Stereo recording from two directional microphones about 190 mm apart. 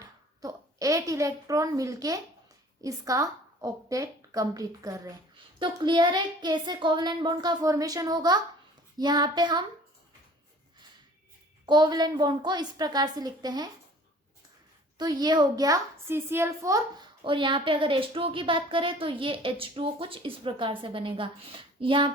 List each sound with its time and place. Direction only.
0.0 s a woman's voice: 20° right (ahead or behind)
11.6 s a woman's voice: 20° right (ahead or behind)
14.9 s a woman's voice: 20° right (ahead or behind)